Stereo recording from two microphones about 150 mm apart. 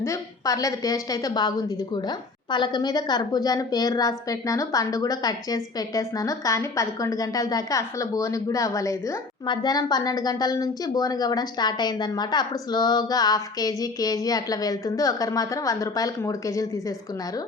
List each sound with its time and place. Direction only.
0.0 s a woman's voice: 20° left (ahead or behind)